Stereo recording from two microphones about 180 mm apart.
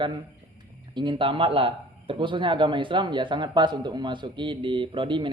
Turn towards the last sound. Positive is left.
turn(degrees=-25)  # may be behind; listen again after turning